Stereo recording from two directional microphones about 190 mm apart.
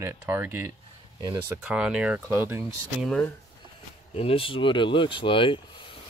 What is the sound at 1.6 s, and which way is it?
Speech, 5° right (ahead or behind).